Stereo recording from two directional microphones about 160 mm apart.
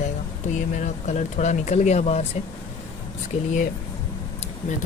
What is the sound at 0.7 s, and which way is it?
Speech, 50° left (ahead or behind).